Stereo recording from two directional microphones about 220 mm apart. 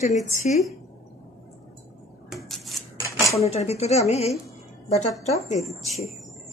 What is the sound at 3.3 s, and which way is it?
Speech, 30° left (ahead or behind).